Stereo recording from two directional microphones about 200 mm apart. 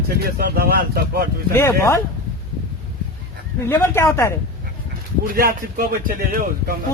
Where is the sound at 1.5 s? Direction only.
15° left (ahead or behind).